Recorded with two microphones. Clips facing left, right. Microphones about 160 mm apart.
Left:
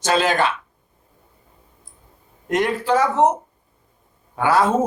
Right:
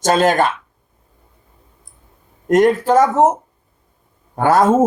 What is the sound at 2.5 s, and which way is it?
Speech, 45° right (ahead or behind).